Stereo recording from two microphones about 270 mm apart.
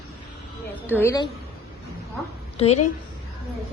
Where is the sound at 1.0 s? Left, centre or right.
Centre.